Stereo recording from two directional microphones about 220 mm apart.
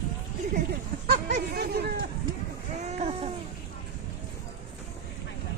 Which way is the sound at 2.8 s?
30° right (ahead or behind).